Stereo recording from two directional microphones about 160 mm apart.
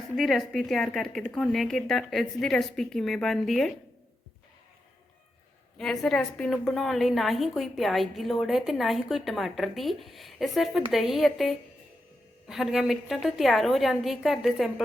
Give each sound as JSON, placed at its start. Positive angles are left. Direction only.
{"t": 0.2, "sound": "a woman's voice", "side_deg": 0}
{"t": 5.7, "sound": "a woman's voice", "side_deg": 0}